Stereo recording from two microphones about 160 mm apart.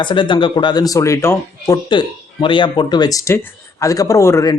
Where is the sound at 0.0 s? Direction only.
30° left (ahead or behind).